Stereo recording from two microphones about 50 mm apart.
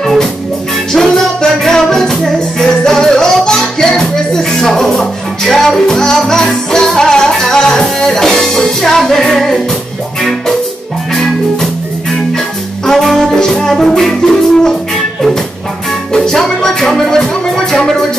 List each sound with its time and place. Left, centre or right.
0.0 s music: centre
11.1 s music: centre
12.8 s music: centre
16.1 s music: centre